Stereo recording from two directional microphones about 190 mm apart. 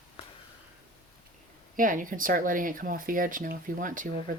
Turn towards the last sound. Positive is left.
turn(degrees=-45)  # may be behind; listen again after turning